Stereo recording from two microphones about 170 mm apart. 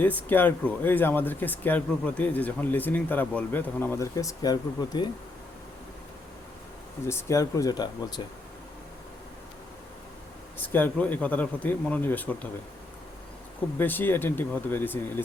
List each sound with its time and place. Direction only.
0.2 s speech: 10° left (ahead or behind)
7.1 s speech: 15° left (ahead or behind)
10.7 s speech: 10° left (ahead or behind)
13.7 s speech: 10° left (ahead or behind)